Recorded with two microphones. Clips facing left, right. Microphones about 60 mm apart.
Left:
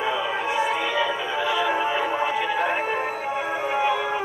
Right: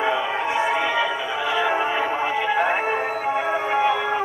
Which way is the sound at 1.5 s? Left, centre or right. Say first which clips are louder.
Right 2 dB; centre.